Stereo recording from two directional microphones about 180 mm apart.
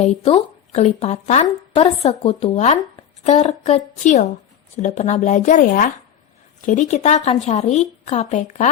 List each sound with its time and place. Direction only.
0.0 s speech: 35° left (ahead or behind)